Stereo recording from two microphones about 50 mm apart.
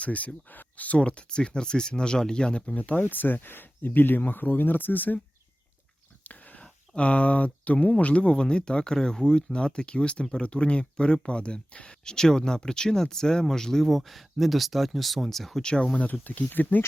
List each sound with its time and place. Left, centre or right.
0.0 s speech: left
2.7 s speech: left
6.2 s a sound: left
6.9 s speech: left; by 15.6 s centre
15.6 s speech: centre
16.2 s speech: left